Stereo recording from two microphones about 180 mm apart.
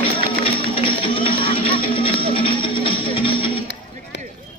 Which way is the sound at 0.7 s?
30° left (ahead or behind).